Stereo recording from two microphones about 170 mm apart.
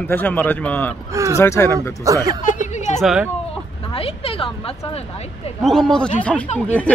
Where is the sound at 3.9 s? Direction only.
35° left (ahead or behind).